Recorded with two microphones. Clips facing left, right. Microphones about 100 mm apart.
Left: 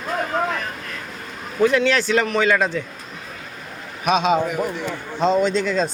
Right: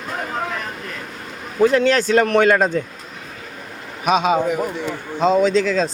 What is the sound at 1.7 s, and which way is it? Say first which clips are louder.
Speech: right 3 dB; 40° right (ahead or behind).